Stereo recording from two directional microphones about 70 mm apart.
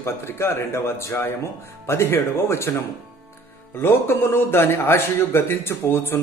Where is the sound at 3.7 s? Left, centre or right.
Left.